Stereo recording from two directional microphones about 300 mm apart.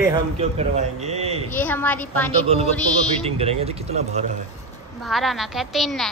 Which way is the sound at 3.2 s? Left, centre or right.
Centre.